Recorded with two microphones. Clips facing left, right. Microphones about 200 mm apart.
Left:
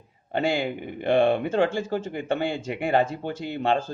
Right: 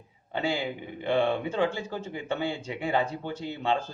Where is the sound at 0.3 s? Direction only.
70° left (ahead or behind).